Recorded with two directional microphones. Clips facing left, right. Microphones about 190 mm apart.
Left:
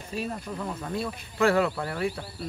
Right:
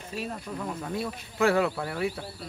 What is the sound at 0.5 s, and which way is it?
Speech, centre (ahead or behind).